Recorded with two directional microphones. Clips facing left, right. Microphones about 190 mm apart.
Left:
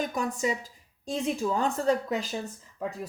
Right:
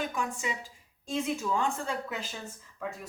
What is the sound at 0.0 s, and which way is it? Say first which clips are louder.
A woman's voice: left 5 dB; 40° left (ahead or behind).